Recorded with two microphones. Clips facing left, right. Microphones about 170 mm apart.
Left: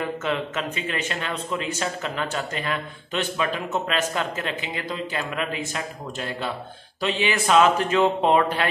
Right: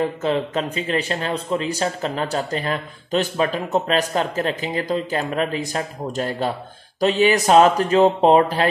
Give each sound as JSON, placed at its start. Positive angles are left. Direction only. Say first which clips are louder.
{"t": 0.0, "sound": "speech", "louder": "right 5 dB", "side_deg": -35}